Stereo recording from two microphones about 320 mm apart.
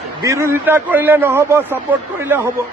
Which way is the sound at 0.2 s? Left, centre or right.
Centre.